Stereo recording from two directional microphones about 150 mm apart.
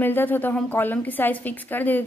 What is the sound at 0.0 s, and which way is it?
A woman's voice, 15° left (ahead or behind).